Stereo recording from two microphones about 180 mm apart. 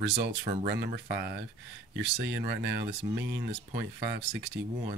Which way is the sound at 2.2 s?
75° right (ahead or behind).